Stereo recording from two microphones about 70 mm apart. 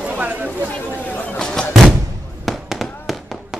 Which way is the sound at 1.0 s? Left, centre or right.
Left.